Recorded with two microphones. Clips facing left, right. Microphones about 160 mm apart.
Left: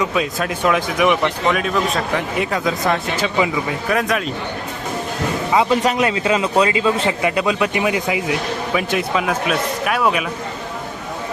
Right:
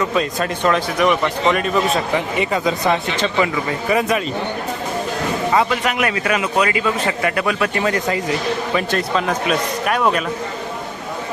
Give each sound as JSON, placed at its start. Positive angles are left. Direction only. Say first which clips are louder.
{"t": 0.0, "sound": "a man's voice", "louder": "right 1 dB", "side_deg": 5}
{"t": 3.8, "sound": "speech", "louder": "right 2 dB", "side_deg": 0}
{"t": 5.7, "sound": "a man's voice", "louder": "left 3 dB", "side_deg": 30}